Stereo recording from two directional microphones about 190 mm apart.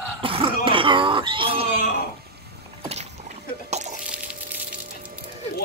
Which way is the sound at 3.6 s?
35° right (ahead or behind).